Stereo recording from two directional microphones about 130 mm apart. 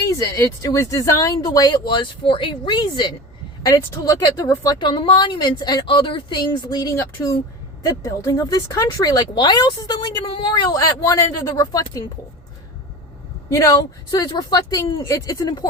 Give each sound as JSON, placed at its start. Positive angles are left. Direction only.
{"t": 0.2, "sound": "speech", "side_deg": 25}
{"t": 13.5, "sound": "speech", "side_deg": 25}